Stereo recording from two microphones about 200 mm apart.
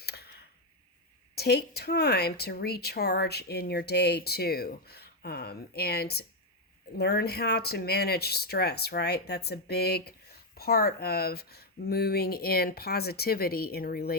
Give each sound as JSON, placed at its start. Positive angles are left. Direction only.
{"t": 0.0, "sound": "clicking", "side_deg": 55}
{"t": 1.4, "sound": "speech", "side_deg": 55}